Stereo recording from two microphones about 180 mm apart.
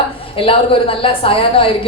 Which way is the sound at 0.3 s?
30° left (ahead or behind).